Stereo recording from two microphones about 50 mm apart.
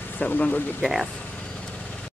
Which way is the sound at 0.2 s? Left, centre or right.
Left.